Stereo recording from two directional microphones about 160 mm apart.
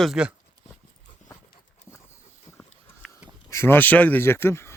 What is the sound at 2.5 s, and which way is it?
Livestock, 15° left (ahead or behind).